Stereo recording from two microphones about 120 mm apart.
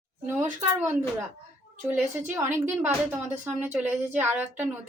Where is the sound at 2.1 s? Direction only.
20° right (ahead or behind).